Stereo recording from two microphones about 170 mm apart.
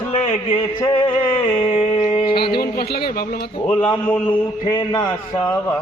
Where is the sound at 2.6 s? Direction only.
65° left (ahead or behind).